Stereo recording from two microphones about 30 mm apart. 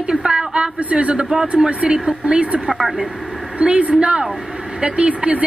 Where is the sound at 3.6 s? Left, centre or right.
Right.